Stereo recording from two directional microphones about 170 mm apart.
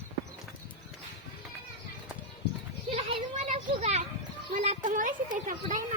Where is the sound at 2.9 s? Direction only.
35° right (ahead or behind); by 5.8 s 50° right (ahead or behind).